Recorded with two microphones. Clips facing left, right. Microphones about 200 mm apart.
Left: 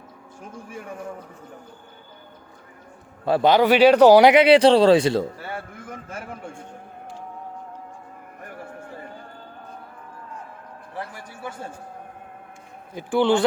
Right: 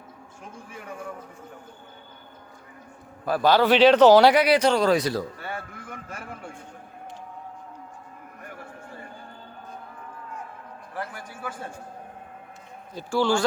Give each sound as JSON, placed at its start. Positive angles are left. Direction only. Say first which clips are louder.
{"t": 3.2, "sound": "speech", "louder": "left 3 dB", "side_deg": 25}
{"t": 12.9, "sound": "a man's voice", "louder": "left 4 dB", "side_deg": 15}